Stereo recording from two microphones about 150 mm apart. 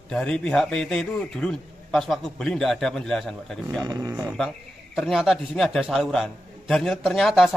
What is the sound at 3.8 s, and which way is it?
Speech, 25° right (ahead or behind).